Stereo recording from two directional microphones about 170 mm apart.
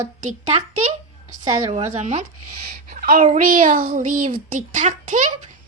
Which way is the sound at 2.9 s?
55° right (ahead or behind).